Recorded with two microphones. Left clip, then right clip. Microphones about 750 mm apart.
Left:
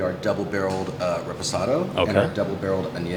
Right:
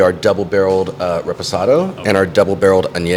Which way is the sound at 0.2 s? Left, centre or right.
Right.